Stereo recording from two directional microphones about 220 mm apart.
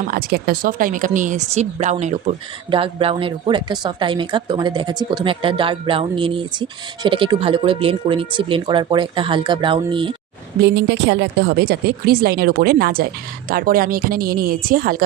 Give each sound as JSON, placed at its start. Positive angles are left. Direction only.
{"t": 0.1, "sound": "speech", "side_deg": -45}
{"t": 10.6, "sound": "a woman's voice", "side_deg": -50}